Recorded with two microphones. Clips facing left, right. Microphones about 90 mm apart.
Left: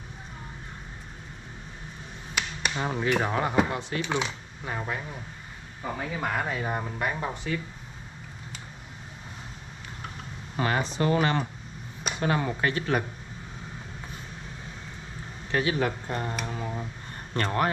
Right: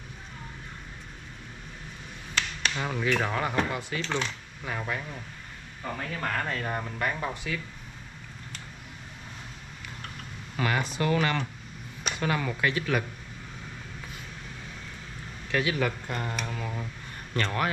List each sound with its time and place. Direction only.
2.3 s finger snapping: 10° left (ahead or behind)
2.8 s speech: 20° left (ahead or behind)
10.5 s a sound: 30° left (ahead or behind)
11.0 s speech: 30° left (ahead or behind)
15.5 s speech: 30° left (ahead or behind)